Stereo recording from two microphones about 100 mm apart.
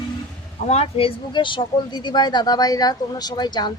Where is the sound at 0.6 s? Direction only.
90° left.